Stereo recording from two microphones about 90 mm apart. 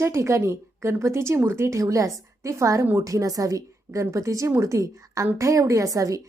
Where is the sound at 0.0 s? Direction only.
35° right (ahead or behind).